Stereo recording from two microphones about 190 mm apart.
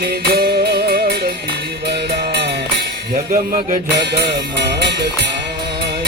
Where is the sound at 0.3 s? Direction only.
55° right (ahead or behind).